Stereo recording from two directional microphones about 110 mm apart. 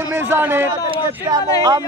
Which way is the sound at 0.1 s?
20° right (ahead or behind).